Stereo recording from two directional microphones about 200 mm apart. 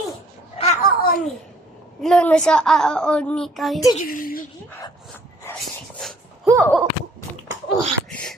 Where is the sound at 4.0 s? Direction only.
45° left (ahead or behind).